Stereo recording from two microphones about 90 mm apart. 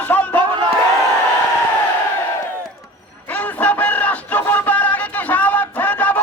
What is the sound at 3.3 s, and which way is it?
Music, 20° left (ahead or behind).